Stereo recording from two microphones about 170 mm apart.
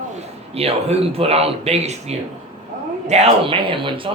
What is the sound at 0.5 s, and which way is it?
A man's voice, 35° right (ahead or behind).